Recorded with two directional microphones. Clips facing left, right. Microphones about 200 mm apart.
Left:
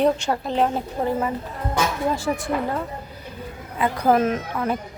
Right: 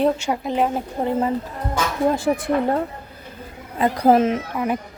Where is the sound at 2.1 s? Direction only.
55° right (ahead or behind).